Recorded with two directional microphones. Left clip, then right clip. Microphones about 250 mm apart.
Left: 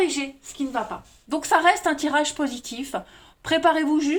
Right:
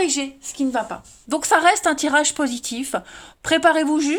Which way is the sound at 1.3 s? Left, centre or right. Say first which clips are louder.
Right 3 dB; right.